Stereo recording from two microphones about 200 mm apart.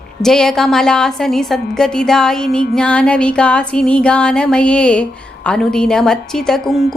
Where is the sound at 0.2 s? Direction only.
Centre (ahead or behind).